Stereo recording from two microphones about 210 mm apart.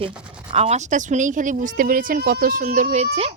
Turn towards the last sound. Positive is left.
turn(degrees=-30)  # may be behind; listen again after turning